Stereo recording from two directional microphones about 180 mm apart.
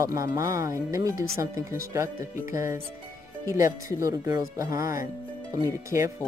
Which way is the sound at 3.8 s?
15° right (ahead or behind).